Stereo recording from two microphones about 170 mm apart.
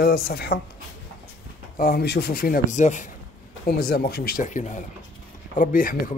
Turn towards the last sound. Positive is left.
turn(degrees=55)  # may be behind; listen again after turning